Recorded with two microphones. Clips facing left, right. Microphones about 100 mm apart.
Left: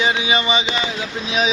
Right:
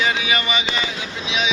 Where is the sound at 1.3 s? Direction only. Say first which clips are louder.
Left 3 dB; 40° left (ahead or behind).